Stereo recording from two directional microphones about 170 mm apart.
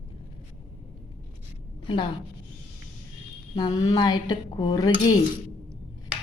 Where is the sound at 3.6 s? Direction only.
25° left (ahead or behind).